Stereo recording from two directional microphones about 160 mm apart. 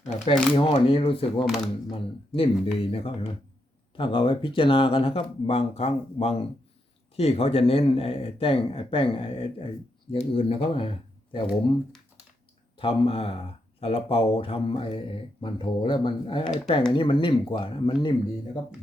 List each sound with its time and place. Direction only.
0.5 s speech: 30° left (ahead or behind)
1.5 s speech: centre (ahead or behind)
1.9 s speech: 35° left (ahead or behind)
12.8 s speech: 35° left (ahead or behind)